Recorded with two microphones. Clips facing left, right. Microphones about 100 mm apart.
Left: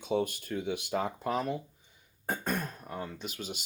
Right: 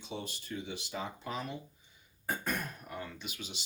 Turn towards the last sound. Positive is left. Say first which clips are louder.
# left 5 dB
turn(degrees=45)  # may be behind; listen again after turning